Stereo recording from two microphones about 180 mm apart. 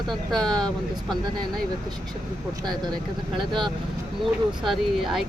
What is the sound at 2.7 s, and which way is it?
Speech, 25° right (ahead or behind).